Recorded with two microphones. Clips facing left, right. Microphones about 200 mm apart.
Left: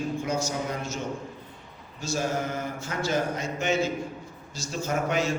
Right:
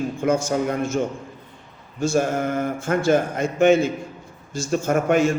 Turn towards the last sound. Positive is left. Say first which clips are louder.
# right 8 dB
turn(degrees=-50)  # may be behind; listen again after turning